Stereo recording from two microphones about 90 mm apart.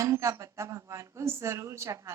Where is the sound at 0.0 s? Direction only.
35° right (ahead or behind).